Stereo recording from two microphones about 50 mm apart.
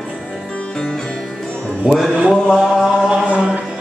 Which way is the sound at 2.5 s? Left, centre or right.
Centre.